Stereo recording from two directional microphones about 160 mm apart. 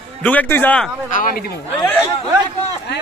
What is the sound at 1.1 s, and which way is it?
Speech, 60° left (ahead or behind).